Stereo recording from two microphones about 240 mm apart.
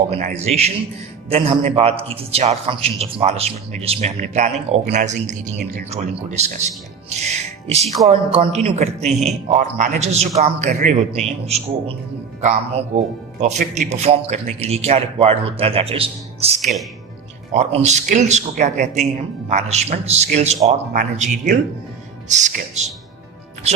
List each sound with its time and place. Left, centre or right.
0.1 s a man's voice: right